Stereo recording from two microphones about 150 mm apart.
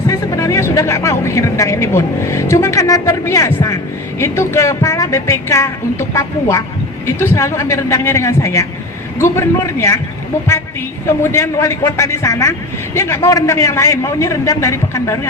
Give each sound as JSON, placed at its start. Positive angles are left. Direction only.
{"t": 0.1, "sound": "a man's voice", "side_deg": 20}
{"t": 11.0, "sound": "a man's voice", "side_deg": 15}